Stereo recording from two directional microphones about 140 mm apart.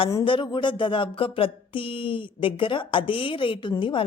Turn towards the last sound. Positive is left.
turn(degrees=35)  # may be behind; listen again after turning